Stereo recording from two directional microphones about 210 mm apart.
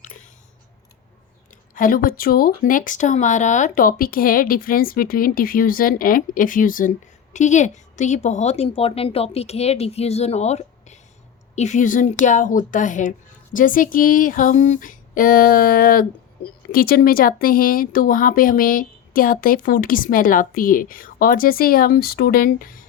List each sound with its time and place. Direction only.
1.7 s speech: 40° left (ahead or behind)